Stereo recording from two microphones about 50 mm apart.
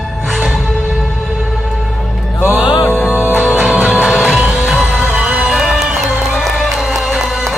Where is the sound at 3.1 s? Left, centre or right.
Right.